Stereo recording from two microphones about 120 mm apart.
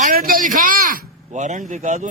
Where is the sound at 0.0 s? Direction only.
90° right.